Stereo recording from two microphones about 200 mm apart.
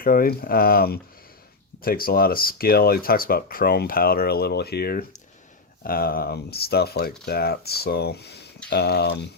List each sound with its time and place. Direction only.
0.0 s speech: 45° left (ahead or behind)